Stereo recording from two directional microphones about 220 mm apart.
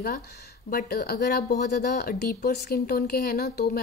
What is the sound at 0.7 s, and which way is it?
Speech, 45° left (ahead or behind).